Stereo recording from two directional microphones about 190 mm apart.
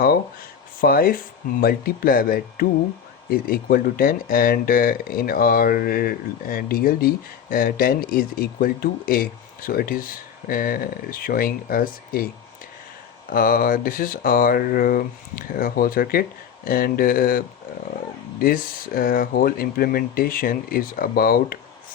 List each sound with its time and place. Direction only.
0.8 s speech: 50° left (ahead or behind)
13.3 s speech: 50° left (ahead or behind)